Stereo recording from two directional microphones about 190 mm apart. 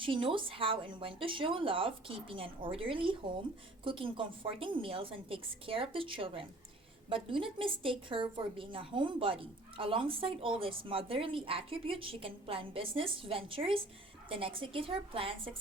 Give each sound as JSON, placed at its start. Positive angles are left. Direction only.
{"t": 0.0, "sound": "a woman's voice", "side_deg": -25}